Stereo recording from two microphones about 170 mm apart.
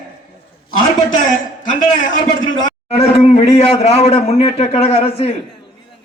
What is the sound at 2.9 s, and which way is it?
Speech, 35° left (ahead or behind).